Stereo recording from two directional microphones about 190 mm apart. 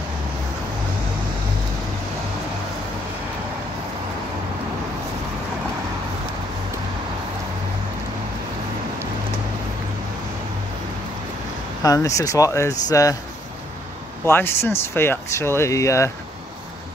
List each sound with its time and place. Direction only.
11.8 s speech: 20° left (ahead or behind)
14.2 s speech: 10° left (ahead or behind)